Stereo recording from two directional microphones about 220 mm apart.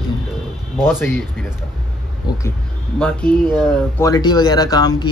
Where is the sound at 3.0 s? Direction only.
5° left (ahead or behind).